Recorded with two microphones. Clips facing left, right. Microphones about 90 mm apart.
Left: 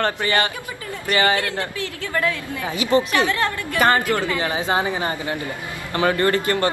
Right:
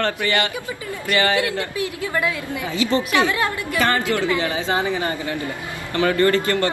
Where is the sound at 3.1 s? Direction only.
20° right (ahead or behind).